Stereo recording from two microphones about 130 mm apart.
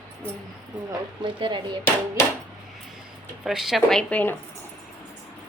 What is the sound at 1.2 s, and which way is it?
Speech, 40° right (ahead or behind).